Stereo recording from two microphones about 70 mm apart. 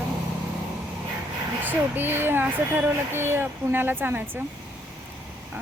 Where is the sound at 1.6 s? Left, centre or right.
Right.